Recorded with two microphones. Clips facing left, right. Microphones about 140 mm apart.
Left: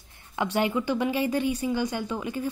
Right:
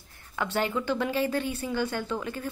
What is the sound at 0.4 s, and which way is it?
A woman's voice, 15° left (ahead or behind).